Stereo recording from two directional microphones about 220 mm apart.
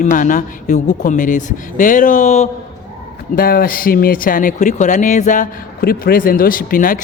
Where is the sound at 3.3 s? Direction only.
40° left (ahead or behind).